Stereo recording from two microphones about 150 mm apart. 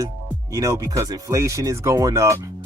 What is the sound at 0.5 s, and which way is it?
Speech, 20° right (ahead or behind).